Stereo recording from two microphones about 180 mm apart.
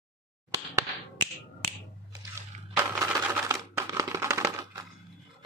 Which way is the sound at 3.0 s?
15° right (ahead or behind).